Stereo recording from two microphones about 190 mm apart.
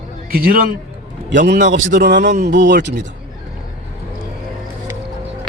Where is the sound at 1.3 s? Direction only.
70° right (ahead or behind).